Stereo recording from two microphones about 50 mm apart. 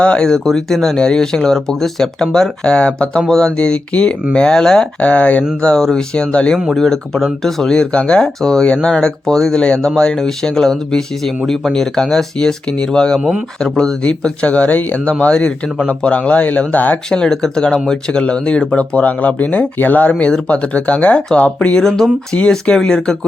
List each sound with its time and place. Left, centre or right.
0.0 s speech: centre
4.9 s speech: left
5.6 s speech: centre
6.7 s speech: centre
14.0 s speech: left
17.1 s speech: centre; by 20.1 s left
20.1 s speech: left
21.8 s speech: centre
22.4 s speech: left
22.7 s speech: centre